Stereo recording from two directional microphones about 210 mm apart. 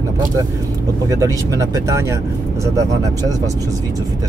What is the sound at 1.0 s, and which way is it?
Speech, 15° right (ahead or behind).